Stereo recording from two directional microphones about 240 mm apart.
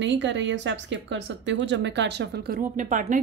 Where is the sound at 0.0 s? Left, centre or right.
Right.